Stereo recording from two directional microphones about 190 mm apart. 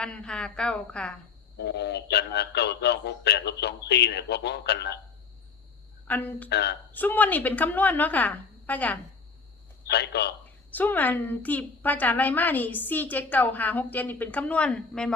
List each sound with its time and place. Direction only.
0.0 s a woman's voice: 5° left (ahead or behind)
1.5 s speech: 65° left (ahead or behind)
6.1 s a woman's voice: 10° left (ahead or behind)
6.5 s speech: 60° left (ahead or behind)
6.9 s a woman's voice: 10° left (ahead or behind)
9.9 s speech: 60° left (ahead or behind)
10.7 s a woman's voice: 10° left (ahead or behind)